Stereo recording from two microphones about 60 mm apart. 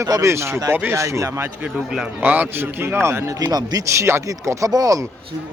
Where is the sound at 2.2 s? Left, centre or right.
Right.